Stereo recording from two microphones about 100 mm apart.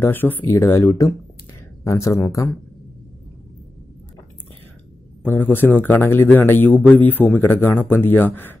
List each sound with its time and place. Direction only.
0.0 s a man's voice: 20° left (ahead or behind)
5.2 s a man's voice: 20° left (ahead or behind)